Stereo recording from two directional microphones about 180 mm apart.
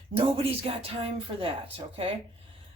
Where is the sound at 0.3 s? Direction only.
35° right (ahead or behind).